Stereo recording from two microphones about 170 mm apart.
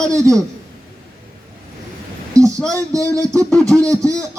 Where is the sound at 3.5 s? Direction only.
5° left (ahead or behind).